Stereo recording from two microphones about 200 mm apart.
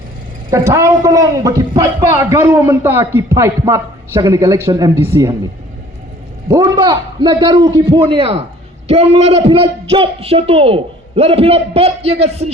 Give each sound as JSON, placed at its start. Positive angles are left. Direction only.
{"t": 0.5, "sound": "a man's voice", "side_deg": -15}
{"t": 6.5, "sound": "a man's voice", "side_deg": -15}